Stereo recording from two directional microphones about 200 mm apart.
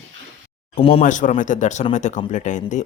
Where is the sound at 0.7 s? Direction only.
30° left (ahead or behind).